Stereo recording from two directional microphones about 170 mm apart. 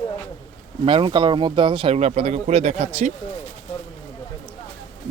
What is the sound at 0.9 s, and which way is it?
Speech, 30° right (ahead or behind).